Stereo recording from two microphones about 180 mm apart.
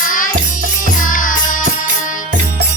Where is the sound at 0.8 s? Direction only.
50° left (ahead or behind).